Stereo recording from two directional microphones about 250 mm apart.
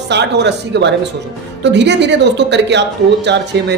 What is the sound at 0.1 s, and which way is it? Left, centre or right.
Speech, right.